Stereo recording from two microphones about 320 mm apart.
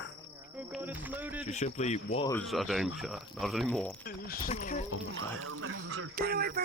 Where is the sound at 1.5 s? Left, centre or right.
Left.